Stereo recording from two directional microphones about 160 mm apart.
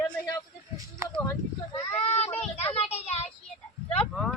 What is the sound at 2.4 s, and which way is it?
Speech, 40° left (ahead or behind).